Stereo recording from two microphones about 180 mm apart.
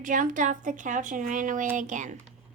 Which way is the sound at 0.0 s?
45° right (ahead or behind).